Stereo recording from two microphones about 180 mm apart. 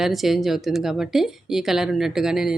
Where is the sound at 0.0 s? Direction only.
Centre (ahead or behind).